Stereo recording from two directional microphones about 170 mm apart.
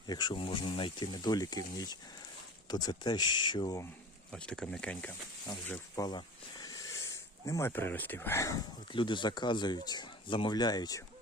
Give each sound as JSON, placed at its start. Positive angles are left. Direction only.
{"t": 0.1, "sound": "speech", "side_deg": 25}
{"t": 4.3, "sound": "speech", "side_deg": 5}
{"t": 6.0, "sound": "speech", "side_deg": 25}
{"t": 8.9, "sound": "speech", "side_deg": 30}